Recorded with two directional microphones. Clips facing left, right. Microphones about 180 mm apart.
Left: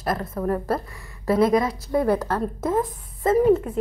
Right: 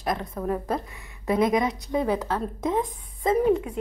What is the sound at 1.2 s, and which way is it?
Speech, 15° right (ahead or behind).